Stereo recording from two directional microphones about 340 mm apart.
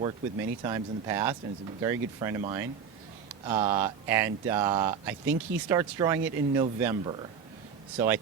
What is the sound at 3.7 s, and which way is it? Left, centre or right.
Speech, centre.